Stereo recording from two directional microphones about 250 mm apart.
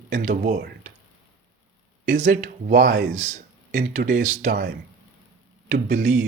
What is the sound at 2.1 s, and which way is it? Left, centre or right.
Speech, right.